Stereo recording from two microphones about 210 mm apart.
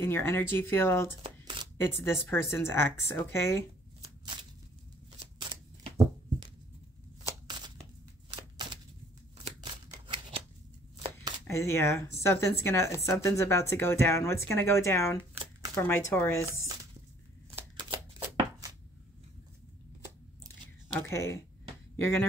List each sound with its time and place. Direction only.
0.0 s speech: 10° left (ahead or behind)
1.4 s a sound: 20° right (ahead or behind)
1.8 s speech: 10° left (ahead or behind)
5.4 s a sound: 20° right (ahead or behind)
9.4 s shuffling cards: 25° right (ahead or behind)
11.0 s chopping: 20° right (ahead or behind)
11.4 s speech: 10° left (ahead or behind)
17.6 s shuffling cards: 25° right (ahead or behind)
21.1 s speech: 15° left (ahead or behind)